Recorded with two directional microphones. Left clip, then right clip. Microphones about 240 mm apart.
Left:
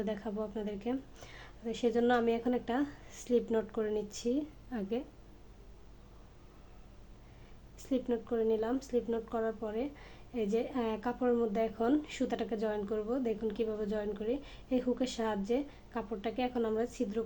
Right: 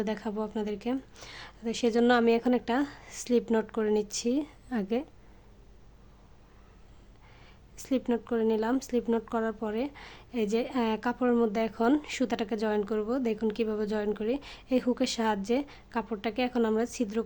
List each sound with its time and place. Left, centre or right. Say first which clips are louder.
0.0 s speech: right 4 dB; right
7.8 s speech: right 4 dB; right